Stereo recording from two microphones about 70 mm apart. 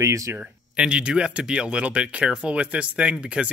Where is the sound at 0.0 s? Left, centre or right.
Right.